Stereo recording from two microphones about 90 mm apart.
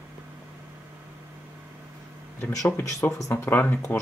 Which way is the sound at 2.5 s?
40° left (ahead or behind).